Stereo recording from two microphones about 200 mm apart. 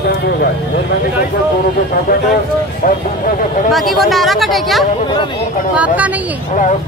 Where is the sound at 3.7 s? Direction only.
Centre (ahead or behind).